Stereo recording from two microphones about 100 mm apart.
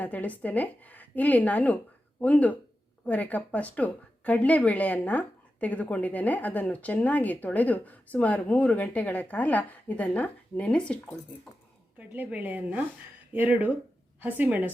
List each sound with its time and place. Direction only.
0.0 s speech: 15° left (ahead or behind)
11.9 s a woman's voice: 15° right (ahead or behind)